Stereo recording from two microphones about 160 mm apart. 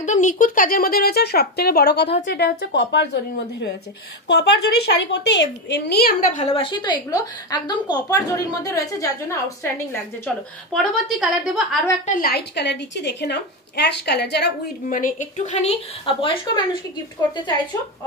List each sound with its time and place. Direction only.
0.0 s a woman's voice: 50° left (ahead or behind); by 3.1 s 90° left
4.3 s a woman's voice: 90° left
6.3 s a woman's voice: 40° left (ahead or behind); by 9.7 s 20° left (ahead or behind)
10.2 s a woman's voice: 5° left (ahead or behind)
12.1 s a woman's voice: 65° left (ahead or behind); by 14.5 s 90° left
14.9 s a woman's voice: 55° left (ahead or behind); by 17.0 s 30° left (ahead or behind)